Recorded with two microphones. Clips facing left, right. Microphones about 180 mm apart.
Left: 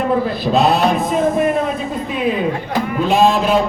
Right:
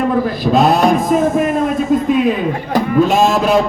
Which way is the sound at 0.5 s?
45° right (ahead or behind).